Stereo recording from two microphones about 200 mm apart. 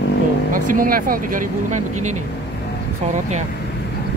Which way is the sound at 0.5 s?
45° right (ahead or behind).